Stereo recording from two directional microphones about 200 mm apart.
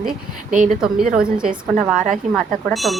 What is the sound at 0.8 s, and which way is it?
Speech, 5° right (ahead or behind).